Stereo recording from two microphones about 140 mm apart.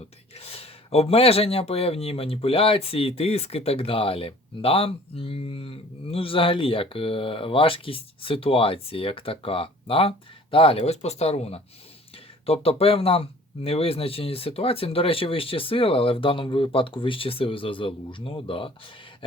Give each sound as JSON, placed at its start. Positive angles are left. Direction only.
{"t": 0.3, "sound": "speech", "side_deg": 45}